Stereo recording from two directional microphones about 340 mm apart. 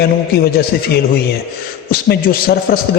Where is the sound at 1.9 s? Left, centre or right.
Left.